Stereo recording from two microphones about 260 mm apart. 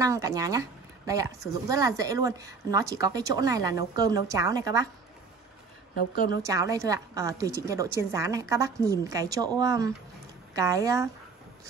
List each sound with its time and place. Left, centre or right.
0.0 s a woman's voice: centre
5.9 s a woman's voice: left
6.4 s a woman's voice: centre